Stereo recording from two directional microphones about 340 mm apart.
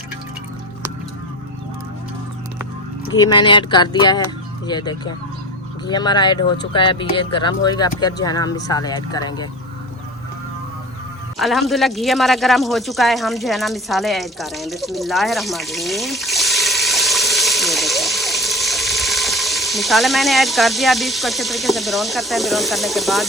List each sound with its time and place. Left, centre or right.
3.1 s speech: centre
11.3 s speech: centre